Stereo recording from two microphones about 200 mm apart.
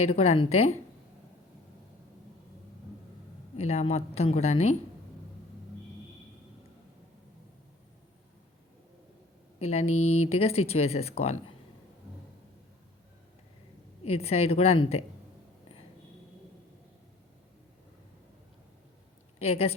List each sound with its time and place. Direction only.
0.0 s speech: 30° left (ahead or behind)
3.6 s speech: 30° left (ahead or behind)
9.6 s speech: 30° left (ahead or behind)
14.0 s speech: 30° left (ahead or behind)
19.4 s speech: 30° left (ahead or behind)